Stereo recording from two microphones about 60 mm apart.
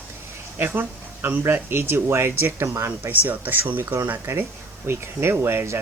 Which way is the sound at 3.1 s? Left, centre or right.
Right.